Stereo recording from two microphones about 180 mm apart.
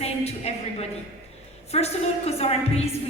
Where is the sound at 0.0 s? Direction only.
35° left (ahead or behind).